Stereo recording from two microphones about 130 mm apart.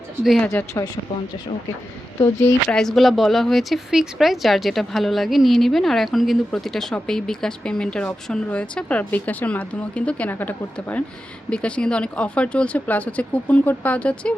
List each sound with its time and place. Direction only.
0.4 s a woman's voice: 20° left (ahead or behind)
2.2 s speech: 5° left (ahead or behind)